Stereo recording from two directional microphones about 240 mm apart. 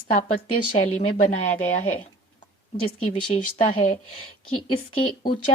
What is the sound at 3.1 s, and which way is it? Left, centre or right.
Speech, left.